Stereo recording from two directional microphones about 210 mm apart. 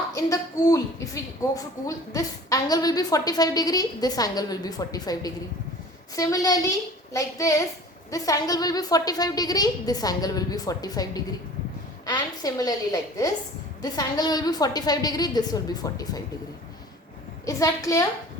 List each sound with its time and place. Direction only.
0.1 s a woman's voice: 15° left (ahead or behind)
17.4 s a woman's voice: 15° left (ahead or behind)